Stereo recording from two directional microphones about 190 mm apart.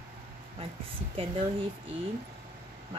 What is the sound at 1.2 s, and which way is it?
Speech, 30° right (ahead or behind).